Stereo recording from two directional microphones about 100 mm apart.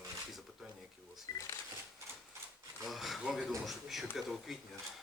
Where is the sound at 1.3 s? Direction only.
40° left (ahead or behind).